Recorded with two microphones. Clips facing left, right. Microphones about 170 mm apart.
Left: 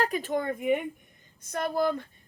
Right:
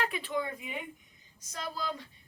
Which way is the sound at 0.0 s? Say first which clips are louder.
Left 5 dB; 45° left (ahead or behind).